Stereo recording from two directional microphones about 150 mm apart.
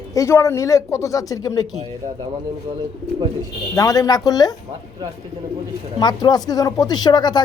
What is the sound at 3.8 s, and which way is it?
Speech, 25° left (ahead or behind).